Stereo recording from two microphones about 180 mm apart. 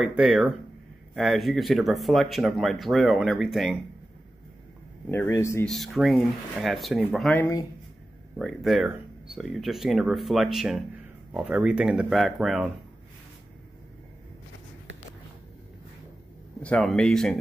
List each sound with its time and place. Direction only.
0.0 s speech: 5° right (ahead or behind)
5.1 s speech: 15° left (ahead or behind)
5.7 s speech: centre (ahead or behind)
7.3 s speech: 15° left (ahead or behind)
8.4 s speech: centre (ahead or behind)
16.6 s speech: 5° left (ahead or behind)